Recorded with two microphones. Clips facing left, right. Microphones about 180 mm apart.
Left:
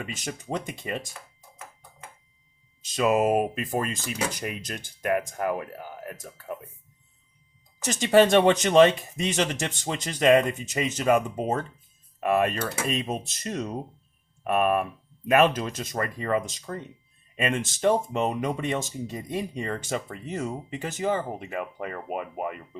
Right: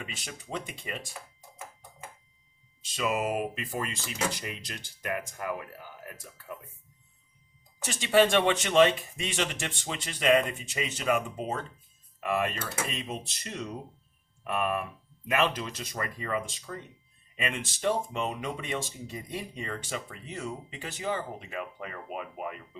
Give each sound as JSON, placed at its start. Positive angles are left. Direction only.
{"t": 0.0, "sound": "speech", "side_deg": 45}
{"t": 2.8, "sound": "speech", "side_deg": 45}
{"t": 7.9, "sound": "speech", "side_deg": 45}
{"t": 12.2, "sound": "speech", "side_deg": 55}